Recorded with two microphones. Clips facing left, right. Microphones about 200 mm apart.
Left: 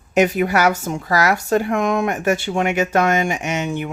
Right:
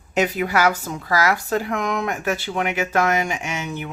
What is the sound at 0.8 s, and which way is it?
Speech, 25° left (ahead or behind).